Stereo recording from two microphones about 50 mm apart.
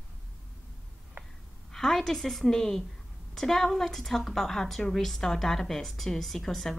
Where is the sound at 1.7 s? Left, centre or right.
Centre.